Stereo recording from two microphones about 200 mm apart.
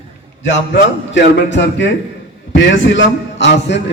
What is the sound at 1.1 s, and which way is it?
A man's voice, 65° left (ahead or behind).